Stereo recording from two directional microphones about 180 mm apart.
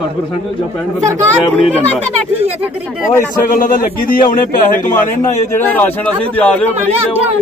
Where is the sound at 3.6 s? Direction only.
50° left (ahead or behind).